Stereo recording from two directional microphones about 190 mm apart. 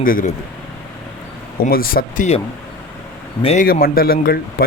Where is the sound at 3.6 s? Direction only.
50° left (ahead or behind).